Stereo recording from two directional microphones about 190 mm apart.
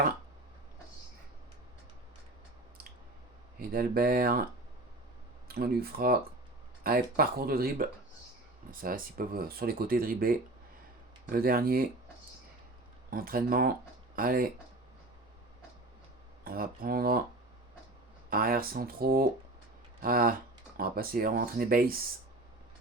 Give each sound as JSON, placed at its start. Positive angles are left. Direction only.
{"t": 3.6, "sound": "speech", "side_deg": -50}
{"t": 5.5, "sound": "speech", "side_deg": -55}
{"t": 13.1, "sound": "speech", "side_deg": -50}
{"t": 16.4, "sound": "speech", "side_deg": -50}
{"t": 18.3, "sound": "speech", "side_deg": -50}